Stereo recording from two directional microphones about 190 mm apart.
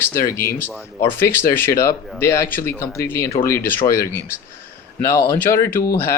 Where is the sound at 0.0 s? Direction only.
15° left (ahead or behind).